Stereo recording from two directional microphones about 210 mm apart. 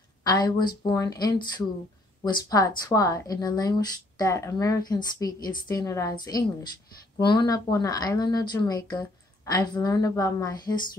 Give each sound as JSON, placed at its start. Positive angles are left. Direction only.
{"t": 0.2, "sound": "a woman's voice", "side_deg": 20}